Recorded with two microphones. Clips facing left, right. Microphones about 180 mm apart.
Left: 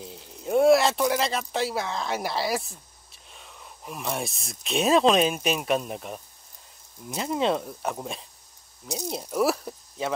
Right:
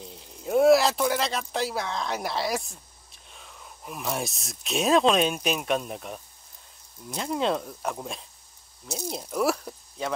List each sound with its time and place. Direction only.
0.0 s speech: centre (ahead or behind)